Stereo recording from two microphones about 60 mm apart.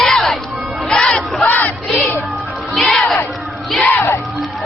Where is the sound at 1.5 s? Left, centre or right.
Left.